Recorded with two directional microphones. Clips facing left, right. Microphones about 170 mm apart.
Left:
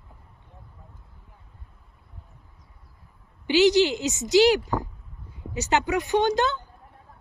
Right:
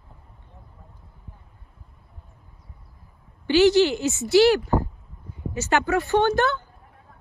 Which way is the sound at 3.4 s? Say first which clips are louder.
Right 2 dB; 15° left (ahead or behind).